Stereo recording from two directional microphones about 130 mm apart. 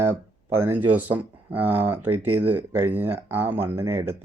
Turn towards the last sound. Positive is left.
turn(degrees=-20)  # may be behind; listen again after turning